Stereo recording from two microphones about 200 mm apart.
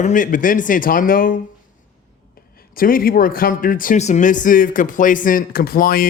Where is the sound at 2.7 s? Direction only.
45° left (ahead or behind).